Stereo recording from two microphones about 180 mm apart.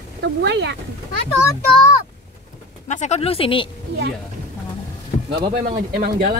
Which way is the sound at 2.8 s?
40° left (ahead or behind).